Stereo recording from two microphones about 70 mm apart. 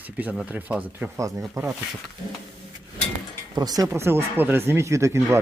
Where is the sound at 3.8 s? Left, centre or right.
Right.